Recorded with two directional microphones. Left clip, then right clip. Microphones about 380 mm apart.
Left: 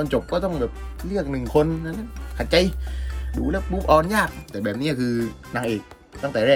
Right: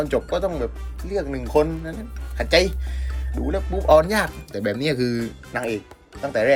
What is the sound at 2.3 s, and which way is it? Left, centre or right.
Speech, left.